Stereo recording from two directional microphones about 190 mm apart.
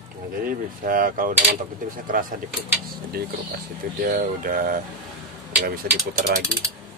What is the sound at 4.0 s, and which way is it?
Speech, 50° right (ahead or behind).